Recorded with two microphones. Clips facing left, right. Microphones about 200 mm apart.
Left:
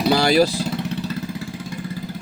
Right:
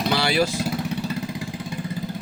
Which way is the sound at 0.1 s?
40° left (ahead or behind).